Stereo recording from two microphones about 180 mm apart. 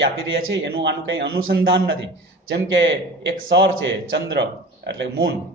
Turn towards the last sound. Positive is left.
turn(degrees=-75)  # may be behind; listen again after turning